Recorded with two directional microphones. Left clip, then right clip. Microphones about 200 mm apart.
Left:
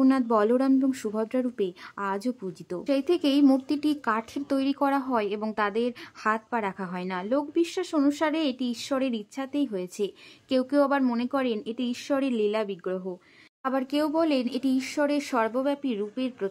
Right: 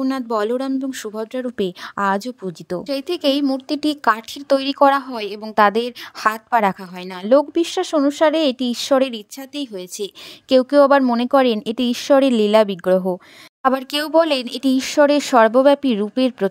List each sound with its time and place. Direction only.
0.0 s speech: 40° right (ahead or behind)